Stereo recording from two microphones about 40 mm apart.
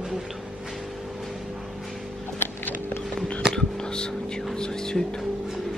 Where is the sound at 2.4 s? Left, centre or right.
Left.